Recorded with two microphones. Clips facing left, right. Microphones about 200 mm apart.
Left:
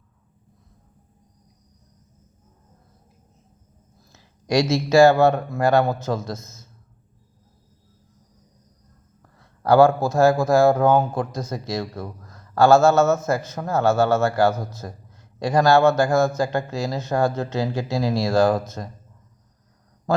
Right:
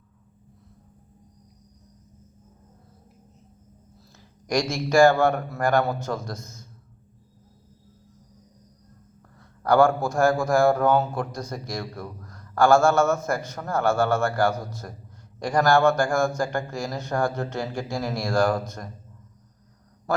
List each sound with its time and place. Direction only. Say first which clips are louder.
4.1 s a man's voice: left 4 dB; 25° left (ahead or behind)
9.6 s a man's voice: left 4 dB; 20° left (ahead or behind)